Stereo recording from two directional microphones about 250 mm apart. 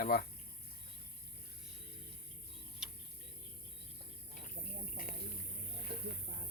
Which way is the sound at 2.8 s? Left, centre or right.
Centre.